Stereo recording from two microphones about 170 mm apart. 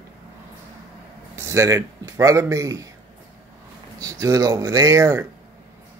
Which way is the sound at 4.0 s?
20° right (ahead or behind).